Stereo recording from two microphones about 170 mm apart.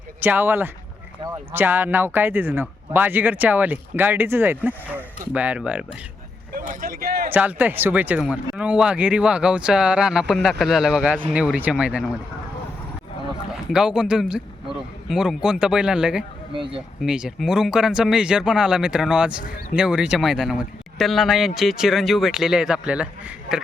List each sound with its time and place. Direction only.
0.2 s speech: 10° right (ahead or behind)
6.5 s a sound: 55° right (ahead or behind)
7.3 s speech: 10° right (ahead or behind)
13.5 s speech: 5° right (ahead or behind)
16.5 s speech: 30° right (ahead or behind)
17.0 s speech: 5° right (ahead or behind)